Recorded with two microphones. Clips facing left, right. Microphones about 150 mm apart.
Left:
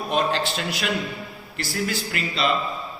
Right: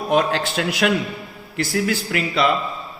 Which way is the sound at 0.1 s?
75° right (ahead or behind).